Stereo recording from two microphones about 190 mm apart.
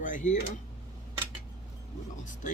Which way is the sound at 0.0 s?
40° left (ahead or behind).